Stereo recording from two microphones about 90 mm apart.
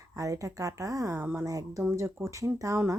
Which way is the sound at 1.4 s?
40° right (ahead or behind).